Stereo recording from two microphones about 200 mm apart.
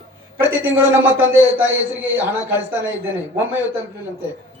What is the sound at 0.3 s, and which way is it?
A man's voice, 10° right (ahead or behind).